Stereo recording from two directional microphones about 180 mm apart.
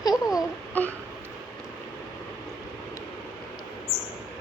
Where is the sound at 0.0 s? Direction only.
20° left (ahead or behind).